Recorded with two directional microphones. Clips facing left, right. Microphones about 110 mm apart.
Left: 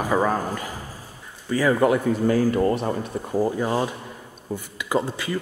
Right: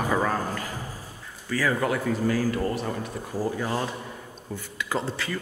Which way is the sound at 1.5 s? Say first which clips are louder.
Left 6 dB; 20° left (ahead or behind).